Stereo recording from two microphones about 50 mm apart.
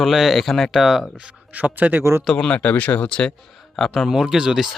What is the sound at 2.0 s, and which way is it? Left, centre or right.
Speech, right.